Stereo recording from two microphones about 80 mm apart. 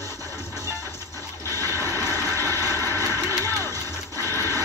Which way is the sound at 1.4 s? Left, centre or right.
Left.